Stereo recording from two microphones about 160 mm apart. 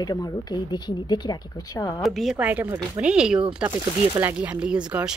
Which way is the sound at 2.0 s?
Centre (ahead or behind).